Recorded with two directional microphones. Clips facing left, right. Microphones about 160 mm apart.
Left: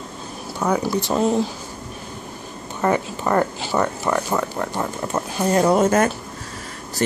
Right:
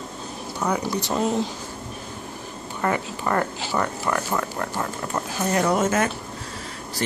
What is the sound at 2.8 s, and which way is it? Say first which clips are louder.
Speech: left 4 dB; 20° left (ahead or behind).